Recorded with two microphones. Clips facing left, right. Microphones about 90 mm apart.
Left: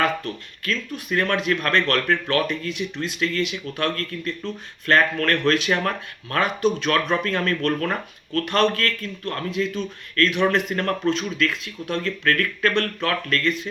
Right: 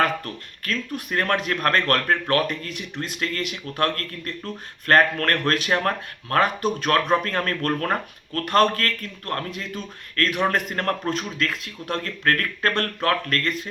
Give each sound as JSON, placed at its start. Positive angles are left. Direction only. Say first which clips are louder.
{"t": 0.6, "sound": "speech", "louder": "even", "side_deg": -45}